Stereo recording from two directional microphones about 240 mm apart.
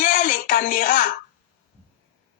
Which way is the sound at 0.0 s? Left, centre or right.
Left.